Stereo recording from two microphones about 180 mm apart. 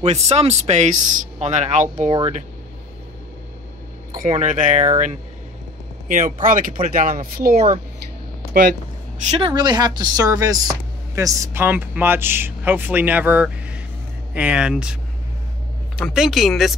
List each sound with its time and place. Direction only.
0.0 s speech: 35° right (ahead or behind)
2.0 s speech: 30° right (ahead or behind)
4.2 s speech: 45° right (ahead or behind)
9.2 s speech: 40° right (ahead or behind)
9.5 s speech: 25° right (ahead or behind); by 15.0 s 5° right (ahead or behind)
16.0 s speech: centre (ahead or behind)